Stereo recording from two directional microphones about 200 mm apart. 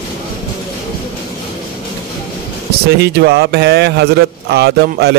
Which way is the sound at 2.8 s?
55° right (ahead or behind).